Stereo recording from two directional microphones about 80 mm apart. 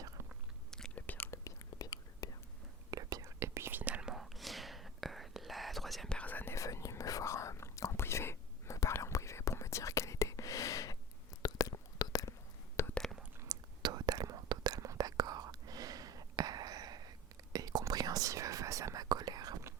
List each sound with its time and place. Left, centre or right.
0.9 s whispering: left
1.3 s whispering: left
2.9 s whispering: right
4.0 s whispering: centre
6.1 s whispering: centre
6.5 s whispering: left
12.9 s whispering: centre
13.5 s whispering: right
19.0 s whispering: right